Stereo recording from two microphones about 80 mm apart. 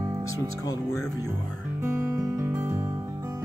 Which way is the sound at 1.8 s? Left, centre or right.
Right.